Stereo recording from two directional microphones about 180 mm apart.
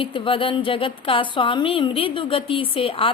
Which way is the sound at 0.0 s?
30° left (ahead or behind).